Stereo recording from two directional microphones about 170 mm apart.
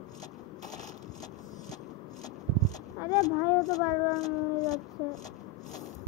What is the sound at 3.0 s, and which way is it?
Speech, 20° left (ahead or behind).